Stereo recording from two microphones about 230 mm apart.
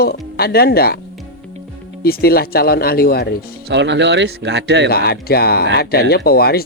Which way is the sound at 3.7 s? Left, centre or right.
Right.